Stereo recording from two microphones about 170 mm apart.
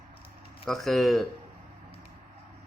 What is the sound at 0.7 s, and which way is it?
Speech, centre (ahead or behind).